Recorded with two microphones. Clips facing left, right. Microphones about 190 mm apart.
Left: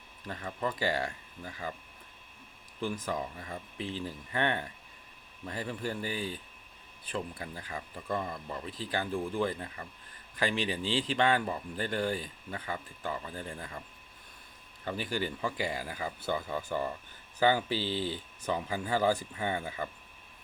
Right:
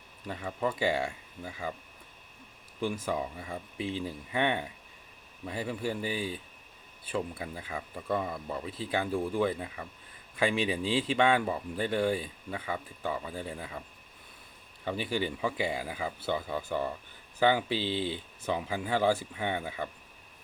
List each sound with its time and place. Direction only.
0.3 s speech: 5° right (ahead or behind)
2.8 s speech: 10° right (ahead or behind)
15.4 s speech: 5° right (ahead or behind)
17.7 s speech: 40° left (ahead or behind)
18.4 s speech: 5° right (ahead or behind)